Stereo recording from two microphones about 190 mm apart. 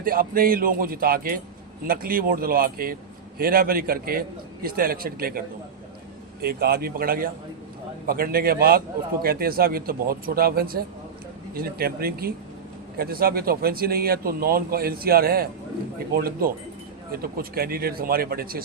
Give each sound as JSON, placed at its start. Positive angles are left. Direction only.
{"t": 0.0, "sound": "a man's voice", "side_deg": -50}
{"t": 6.4, "sound": "a man's voice", "side_deg": -55}